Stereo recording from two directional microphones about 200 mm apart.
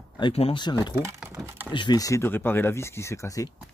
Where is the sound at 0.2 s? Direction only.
30° left (ahead or behind).